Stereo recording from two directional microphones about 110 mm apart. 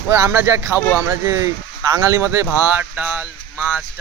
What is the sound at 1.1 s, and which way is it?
Speech, 30° right (ahead or behind).